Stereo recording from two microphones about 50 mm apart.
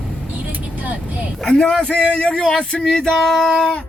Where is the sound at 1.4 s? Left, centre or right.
Centre.